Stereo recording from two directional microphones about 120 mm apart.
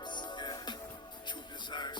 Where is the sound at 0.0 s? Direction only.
40° left (ahead or behind).